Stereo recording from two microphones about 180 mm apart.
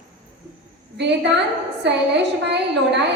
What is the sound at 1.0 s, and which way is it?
A woman's voice, 75° right (ahead or behind).